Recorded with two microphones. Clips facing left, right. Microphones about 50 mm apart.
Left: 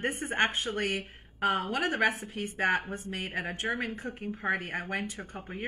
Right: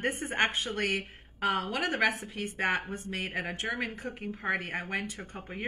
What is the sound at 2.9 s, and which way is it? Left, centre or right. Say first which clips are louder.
Speech: left 1 dB; left.